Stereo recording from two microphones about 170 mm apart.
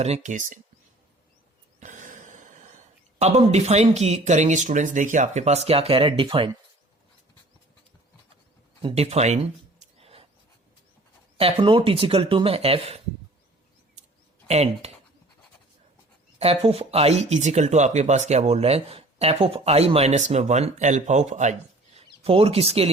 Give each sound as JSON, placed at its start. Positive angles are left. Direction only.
{"t": 0.0, "sound": "speech", "side_deg": -40}
{"t": 1.8, "sound": "a sound", "side_deg": -50}
{"t": 3.5, "sound": "speech", "side_deg": -40}
{"t": 8.8, "sound": "a sound", "side_deg": -35}
{"t": 11.3, "sound": "speech", "side_deg": -35}
{"t": 14.4, "sound": "speech", "side_deg": -40}
{"t": 16.4, "sound": "speech", "side_deg": -35}